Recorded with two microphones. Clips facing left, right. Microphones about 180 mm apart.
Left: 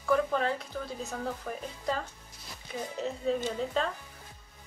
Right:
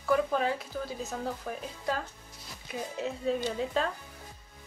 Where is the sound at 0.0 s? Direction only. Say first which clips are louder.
Even; 5° right (ahead or behind).